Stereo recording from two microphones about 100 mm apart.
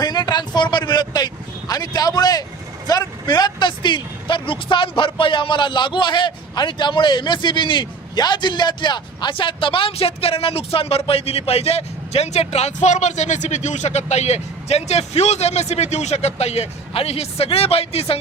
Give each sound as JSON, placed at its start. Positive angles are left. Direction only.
{"t": 0.0, "sound": "vehicle", "side_deg": 45}
{"t": 2.8, "sound": "speech", "side_deg": 40}
{"t": 14.1, "sound": "speech", "side_deg": 90}